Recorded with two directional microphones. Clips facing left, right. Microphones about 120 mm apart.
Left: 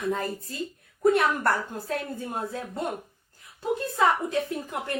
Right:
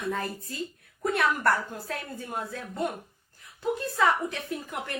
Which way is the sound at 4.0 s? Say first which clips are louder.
Left 3 dB; 20° left (ahead or behind).